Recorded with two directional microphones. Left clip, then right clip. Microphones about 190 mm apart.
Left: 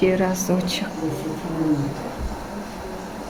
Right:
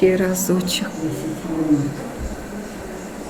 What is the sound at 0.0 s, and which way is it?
Speech, 20° left (ahead or behind).